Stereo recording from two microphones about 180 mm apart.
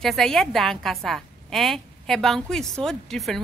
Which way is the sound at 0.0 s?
Centre (ahead or behind).